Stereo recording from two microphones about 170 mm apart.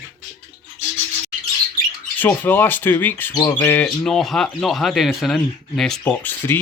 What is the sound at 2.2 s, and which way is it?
Speech, 10° left (ahead or behind).